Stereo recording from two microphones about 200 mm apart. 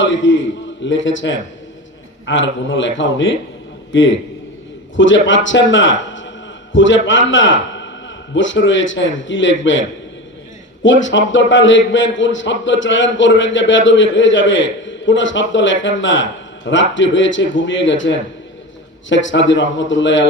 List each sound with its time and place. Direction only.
0.0 s a man's voice: 70° left (ahead or behind)
10.8 s a man's voice: 70° left (ahead or behind)